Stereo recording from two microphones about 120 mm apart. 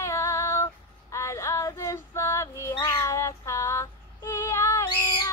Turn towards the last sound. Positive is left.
turn(degrees=25)  # may be behind; listen again after turning